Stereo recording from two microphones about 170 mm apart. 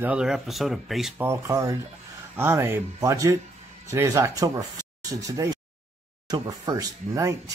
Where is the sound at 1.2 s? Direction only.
15° right (ahead or behind).